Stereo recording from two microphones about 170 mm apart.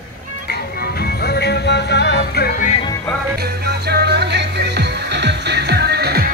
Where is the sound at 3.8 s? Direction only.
75° right (ahead or behind).